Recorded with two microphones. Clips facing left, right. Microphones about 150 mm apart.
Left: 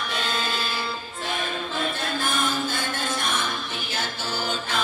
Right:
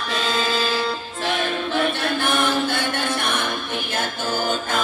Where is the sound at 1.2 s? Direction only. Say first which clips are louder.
Right 6 dB; 80° right; by 3.5 s 65° right (ahead or behind).